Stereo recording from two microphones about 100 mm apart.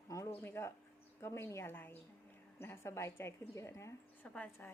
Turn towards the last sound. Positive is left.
turn(degrees=15)  # may be behind; listen again after turning